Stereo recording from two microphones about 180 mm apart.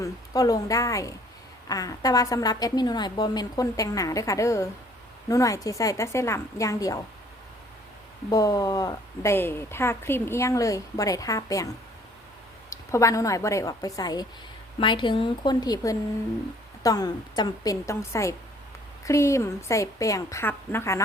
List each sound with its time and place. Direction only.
0.0 s a woman's voice: 20° left (ahead or behind)
8.3 s a woman's voice: 20° left (ahead or behind)
12.7 s a woman's voice: 15° left (ahead or behind)